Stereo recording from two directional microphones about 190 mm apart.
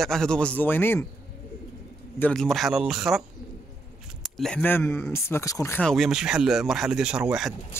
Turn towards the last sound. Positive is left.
turn(degrees=10)  # may be behind; listen again after turning